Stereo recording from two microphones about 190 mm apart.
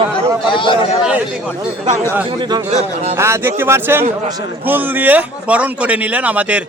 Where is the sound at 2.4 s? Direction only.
20° right (ahead or behind).